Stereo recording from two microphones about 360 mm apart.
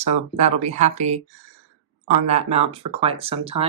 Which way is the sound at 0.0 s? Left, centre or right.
Centre.